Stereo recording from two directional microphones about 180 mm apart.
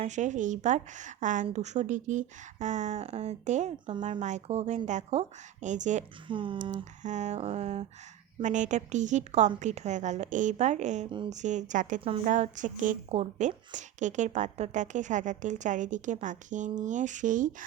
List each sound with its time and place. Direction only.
0.0 s a woman's voice: 40° right (ahead or behind)
6.2 s speech: 30° right (ahead or behind)
7.0 s a woman's voice: 40° right (ahead or behind)